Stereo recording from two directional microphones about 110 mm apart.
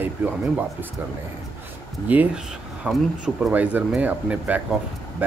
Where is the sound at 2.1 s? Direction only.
15° right (ahead or behind).